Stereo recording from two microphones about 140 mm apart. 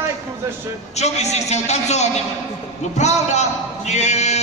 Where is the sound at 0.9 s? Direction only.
55° left (ahead or behind).